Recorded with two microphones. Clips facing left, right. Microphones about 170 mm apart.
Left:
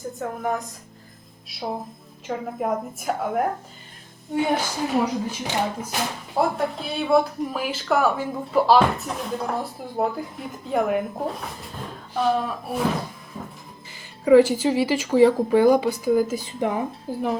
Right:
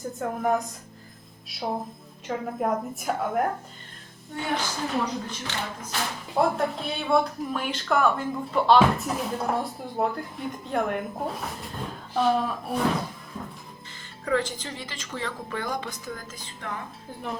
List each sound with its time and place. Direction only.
0.0 s speech: centre (ahead or behind)
4.4 s speech: 15° left (ahead or behind)
6.3 s speech: centre (ahead or behind)
14.3 s speech: 10° left (ahead or behind)